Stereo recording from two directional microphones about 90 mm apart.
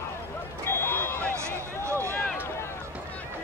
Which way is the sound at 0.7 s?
25° left (ahead or behind).